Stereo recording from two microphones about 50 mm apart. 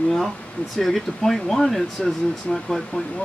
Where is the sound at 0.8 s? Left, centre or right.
Centre.